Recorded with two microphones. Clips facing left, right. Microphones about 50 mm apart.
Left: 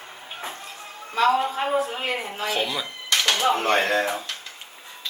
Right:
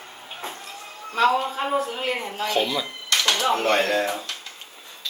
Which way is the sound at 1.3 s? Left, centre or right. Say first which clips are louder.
Left 1 dB; centre.